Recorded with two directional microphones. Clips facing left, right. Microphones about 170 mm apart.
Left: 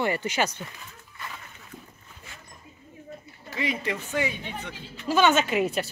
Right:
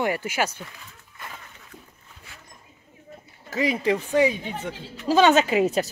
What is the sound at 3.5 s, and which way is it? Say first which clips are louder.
A woman's voice: right 7 dB; 40° right (ahead or behind).